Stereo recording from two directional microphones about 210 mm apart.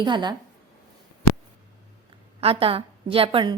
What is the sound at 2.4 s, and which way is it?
A woman's voice, 25° right (ahead or behind).